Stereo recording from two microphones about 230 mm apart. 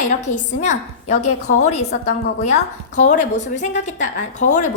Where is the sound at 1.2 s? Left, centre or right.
Left.